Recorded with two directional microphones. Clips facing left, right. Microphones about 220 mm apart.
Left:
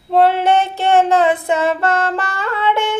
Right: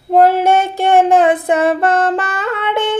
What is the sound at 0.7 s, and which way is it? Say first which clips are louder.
Child singing: right 3 dB; 15° right (ahead or behind).